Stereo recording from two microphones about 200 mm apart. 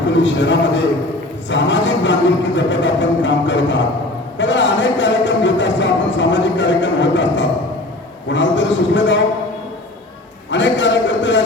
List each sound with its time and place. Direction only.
0.1 s speech: 65° left (ahead or behind)
10.5 s a man's voice: 65° left (ahead or behind)